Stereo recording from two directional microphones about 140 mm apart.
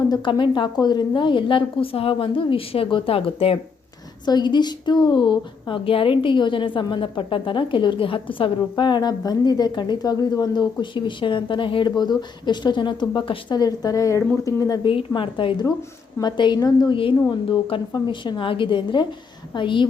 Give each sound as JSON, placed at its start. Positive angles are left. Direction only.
{"t": 0.1, "sound": "a woman's voice", "side_deg": 35}
{"t": 4.3, "sound": "a woman's voice", "side_deg": 30}
{"t": 14.8, "sound": "a woman's voice", "side_deg": 35}